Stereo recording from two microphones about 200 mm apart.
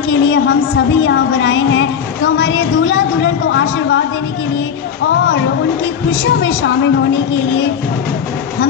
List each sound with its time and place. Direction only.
0.1 s a woman's voice: 65° left (ahead or behind)
6.2 s a woman's voice: 70° left (ahead or behind)